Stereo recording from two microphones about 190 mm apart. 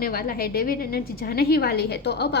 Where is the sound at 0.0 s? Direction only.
50° left (ahead or behind).